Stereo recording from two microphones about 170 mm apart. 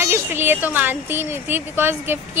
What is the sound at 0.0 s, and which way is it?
A woman's voice, 15° right (ahead or behind).